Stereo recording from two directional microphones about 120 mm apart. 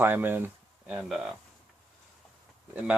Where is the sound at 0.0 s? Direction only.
15° right (ahead or behind).